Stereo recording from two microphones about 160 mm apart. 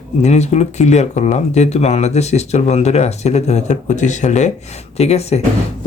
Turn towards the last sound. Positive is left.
turn(degrees=40)  # may be behind; listen again after turning